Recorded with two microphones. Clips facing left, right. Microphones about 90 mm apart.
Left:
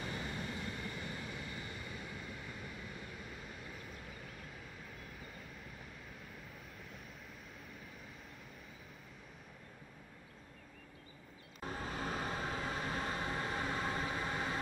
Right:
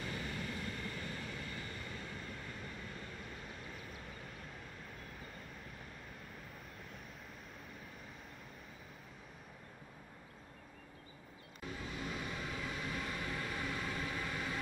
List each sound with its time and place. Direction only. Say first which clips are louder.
0.0 s vehicle: even; 20° left (ahead or behind); by 4.0 s centre (ahead or behind)
11.6 s vehicle: left 3 dB; 40° left (ahead or behind)